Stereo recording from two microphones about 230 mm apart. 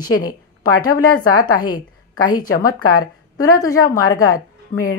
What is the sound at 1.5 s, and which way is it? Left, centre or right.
Speech, left.